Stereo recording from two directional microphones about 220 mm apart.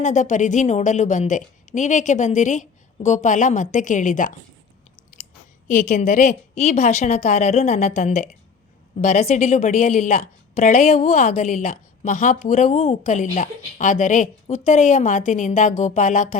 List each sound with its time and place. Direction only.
0.0 s a woman's voice: 35° left (ahead or behind)
5.1 s chewing: 35° left (ahead or behind)
5.6 s a woman's voice: 35° left (ahead or behind)